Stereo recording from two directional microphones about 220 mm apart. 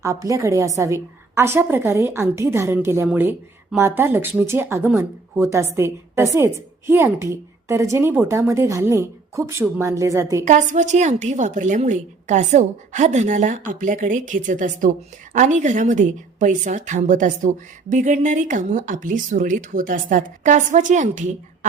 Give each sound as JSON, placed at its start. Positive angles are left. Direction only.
{"t": 0.0, "sound": "a woman's voice", "side_deg": -15}
{"t": 10.4, "sound": "a woman's voice", "side_deg": -35}